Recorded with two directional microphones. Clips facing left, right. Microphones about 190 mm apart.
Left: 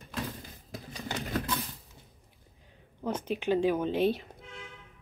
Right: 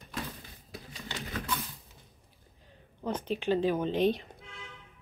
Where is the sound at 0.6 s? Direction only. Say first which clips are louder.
Left 4 dB; 45° left (ahead or behind).